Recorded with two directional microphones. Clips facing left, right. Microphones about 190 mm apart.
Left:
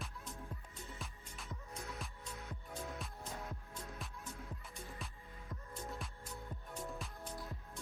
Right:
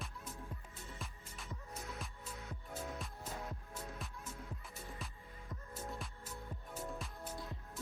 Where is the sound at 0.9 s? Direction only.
Centre (ahead or behind).